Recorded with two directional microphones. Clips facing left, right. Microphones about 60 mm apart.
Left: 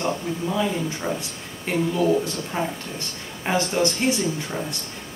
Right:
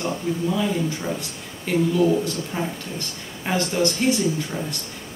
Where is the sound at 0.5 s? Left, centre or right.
Centre.